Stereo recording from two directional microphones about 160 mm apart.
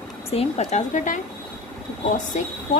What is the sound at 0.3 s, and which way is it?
Speech, 40° left (ahead or behind).